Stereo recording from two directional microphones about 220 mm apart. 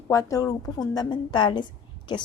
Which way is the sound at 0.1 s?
15° left (ahead or behind).